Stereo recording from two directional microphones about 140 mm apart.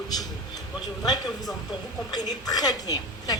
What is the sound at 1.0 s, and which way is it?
A woman's voice, 30° left (ahead or behind).